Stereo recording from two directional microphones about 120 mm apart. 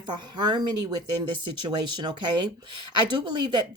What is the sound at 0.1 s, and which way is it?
Speech, 40° right (ahead or behind).